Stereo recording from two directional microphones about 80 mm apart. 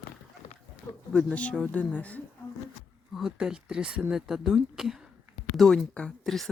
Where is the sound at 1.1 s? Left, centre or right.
Centre.